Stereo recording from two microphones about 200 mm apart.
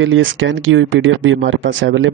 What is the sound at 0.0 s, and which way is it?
Speech, 70° right (ahead or behind).